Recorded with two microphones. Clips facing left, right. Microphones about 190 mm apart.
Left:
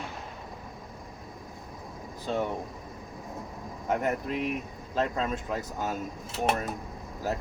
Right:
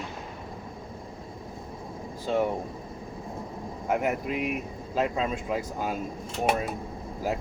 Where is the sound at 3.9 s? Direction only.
10° right (ahead or behind).